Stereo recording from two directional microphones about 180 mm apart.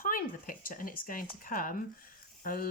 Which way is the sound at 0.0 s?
50° left (ahead or behind).